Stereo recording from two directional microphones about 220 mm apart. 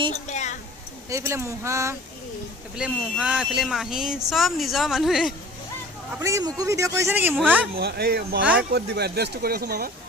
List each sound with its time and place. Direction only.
0.3 s a sound: 30° left (ahead or behind)
1.1 s speech: 10° right (ahead or behind)
6.1 s speech: 15° right (ahead or behind)
7.8 s speech: 45° right (ahead or behind)